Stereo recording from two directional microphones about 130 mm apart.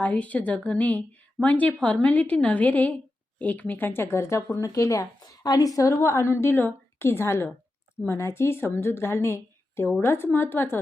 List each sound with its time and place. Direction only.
0.0 s a woman's voice: 10° left (ahead or behind)